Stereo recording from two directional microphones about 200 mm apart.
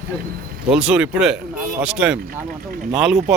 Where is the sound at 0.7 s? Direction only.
5° right (ahead or behind).